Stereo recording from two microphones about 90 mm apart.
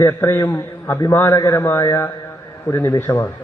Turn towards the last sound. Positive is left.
turn(degrees=25)  # may be behind; listen again after turning